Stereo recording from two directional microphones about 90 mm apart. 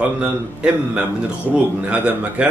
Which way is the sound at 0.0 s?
10° right (ahead or behind).